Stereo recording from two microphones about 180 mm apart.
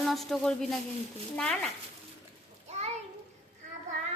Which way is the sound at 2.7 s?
35° right (ahead or behind).